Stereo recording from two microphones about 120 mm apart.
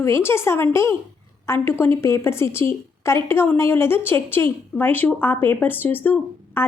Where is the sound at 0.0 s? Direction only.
20° left (ahead or behind).